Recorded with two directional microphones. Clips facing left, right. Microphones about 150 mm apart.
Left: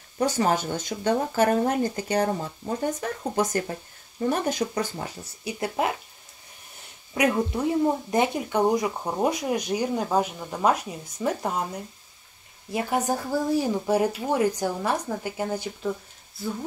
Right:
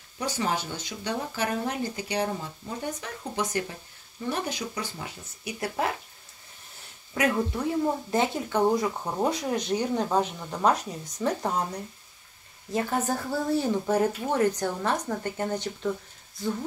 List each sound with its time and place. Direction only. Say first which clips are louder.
0.2 s speech: left 6 dB; 50° left (ahead or behind); by 5.9 s 20° left (ahead or behind)
7.2 s speech: left 3 dB; 20° left (ahead or behind)